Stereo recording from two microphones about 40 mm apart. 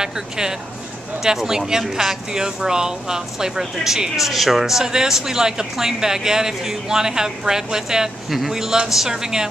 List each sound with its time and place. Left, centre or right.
0.0 s speech: centre